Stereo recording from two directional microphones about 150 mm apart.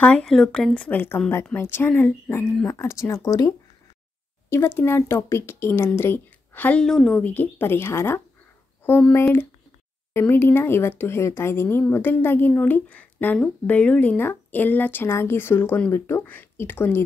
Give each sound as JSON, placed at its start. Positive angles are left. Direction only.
{"t": 0.0, "sound": "speech", "side_deg": 5}